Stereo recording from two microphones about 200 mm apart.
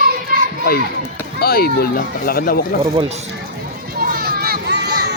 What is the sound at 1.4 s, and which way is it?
Speech, 50° left (ahead or behind).